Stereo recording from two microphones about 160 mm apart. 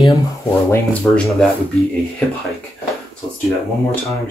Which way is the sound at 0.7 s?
5° left (ahead or behind).